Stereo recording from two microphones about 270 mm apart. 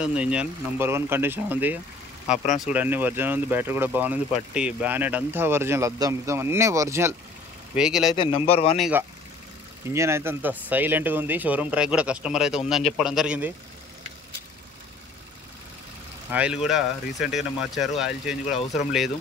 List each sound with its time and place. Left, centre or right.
0.0 s speech: centre
8.2 s speech: left
8.7 s speech: centre
16.3 s speech: centre